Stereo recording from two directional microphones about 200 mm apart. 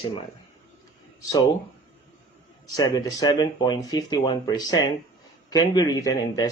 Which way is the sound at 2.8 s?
20° left (ahead or behind).